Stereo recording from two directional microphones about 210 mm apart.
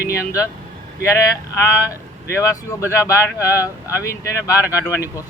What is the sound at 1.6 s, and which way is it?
Speech, 15° left (ahead or behind).